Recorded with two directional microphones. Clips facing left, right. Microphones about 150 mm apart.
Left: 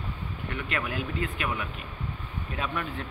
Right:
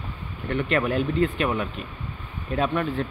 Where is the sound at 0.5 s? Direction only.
35° right (ahead or behind).